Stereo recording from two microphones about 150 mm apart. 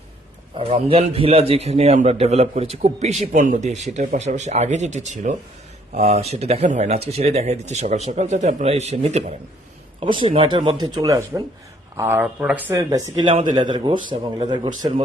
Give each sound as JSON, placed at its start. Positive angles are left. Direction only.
{"t": 0.5, "sound": "speech", "side_deg": -40}
{"t": 10.0, "sound": "speech", "side_deg": -35}
{"t": 13.1, "sound": "speech", "side_deg": -40}